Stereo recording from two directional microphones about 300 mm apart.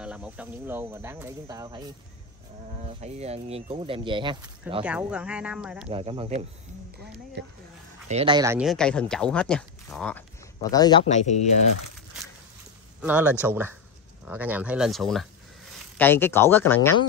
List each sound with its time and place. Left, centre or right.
0.0 s speech: centre
4.8 s speech: centre
5.9 s speech: centre
7.4 s speech: right
8.1 s speech: centre; by 11.3 s left
13.0 s speech: centre